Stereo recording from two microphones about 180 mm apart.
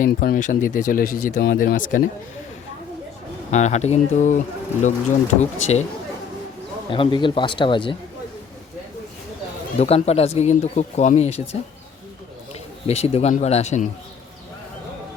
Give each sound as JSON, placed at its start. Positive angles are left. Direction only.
{"t": 0.0, "sound": "speech", "side_deg": 50}
{"t": 3.5, "sound": "speech", "side_deg": 40}
{"t": 6.9, "sound": "speech", "side_deg": 30}
{"t": 9.7, "sound": "speech", "side_deg": 35}
{"t": 12.9, "sound": "speech", "side_deg": 35}